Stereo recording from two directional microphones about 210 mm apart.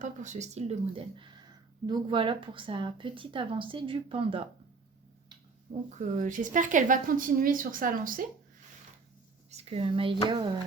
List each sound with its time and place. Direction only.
0.0 s a woman's voice: 35° right (ahead or behind)
5.9 s speech: 35° right (ahead or behind)
9.5 s a woman's voice: 30° right (ahead or behind)